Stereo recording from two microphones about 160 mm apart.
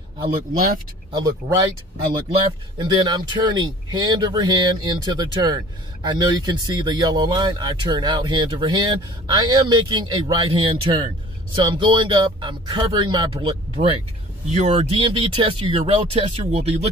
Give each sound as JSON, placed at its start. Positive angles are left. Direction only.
{"t": 1.1, "sound": "speech", "side_deg": -20}
{"t": 2.8, "sound": "speech", "side_deg": -25}
{"t": 14.5, "sound": "speech", "side_deg": -45}